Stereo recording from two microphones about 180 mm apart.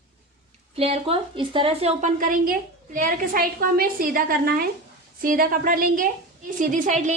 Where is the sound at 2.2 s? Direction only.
50° right (ahead or behind).